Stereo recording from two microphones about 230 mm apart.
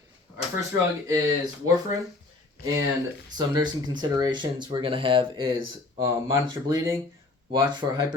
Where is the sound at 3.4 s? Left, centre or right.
Centre.